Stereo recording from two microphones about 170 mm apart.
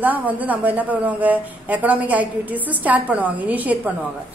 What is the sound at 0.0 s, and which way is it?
A woman's voice, 10° right (ahead or behind).